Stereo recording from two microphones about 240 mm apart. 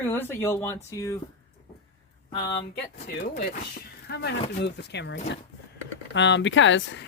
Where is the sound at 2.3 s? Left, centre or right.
Centre.